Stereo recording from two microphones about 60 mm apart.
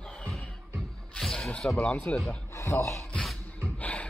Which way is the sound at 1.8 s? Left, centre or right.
Centre.